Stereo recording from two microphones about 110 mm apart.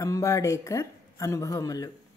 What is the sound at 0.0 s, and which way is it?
Speech, 30° left (ahead or behind).